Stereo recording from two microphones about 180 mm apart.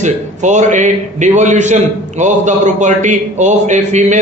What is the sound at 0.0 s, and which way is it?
A man's voice, 40° right (ahead or behind).